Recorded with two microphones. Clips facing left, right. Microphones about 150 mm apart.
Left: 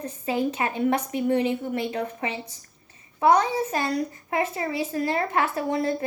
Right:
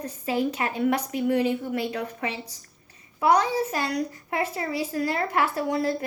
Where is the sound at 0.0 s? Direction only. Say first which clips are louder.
Even; 25° left (ahead or behind).